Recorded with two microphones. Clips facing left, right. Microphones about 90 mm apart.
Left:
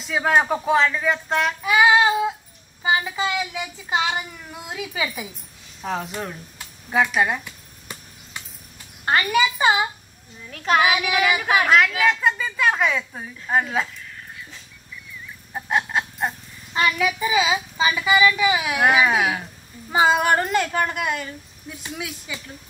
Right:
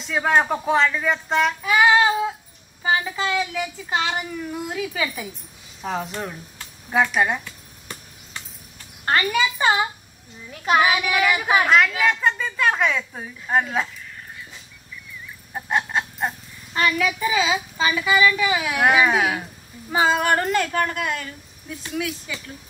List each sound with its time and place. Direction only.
0.0 s speech: 5° left (ahead or behind)
5.8 s a woman's voice: centre (ahead or behind)
7.4 s a sound: 10° left (ahead or behind)
9.0 s speech: 15° left (ahead or behind)
10.5 s a child's voice: 10° right (ahead or behind)
11.1 s a woman's voice: 5° left (ahead or behind)
15.5 s a sound: centre (ahead or behind)
16.7 s speech: 15° left (ahead or behind)
18.8 s a woman's voice: centre (ahead or behind)
19.9 s speech: 15° left (ahead or behind)